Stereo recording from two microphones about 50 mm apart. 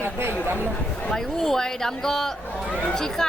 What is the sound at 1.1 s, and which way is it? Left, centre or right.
Speech, centre.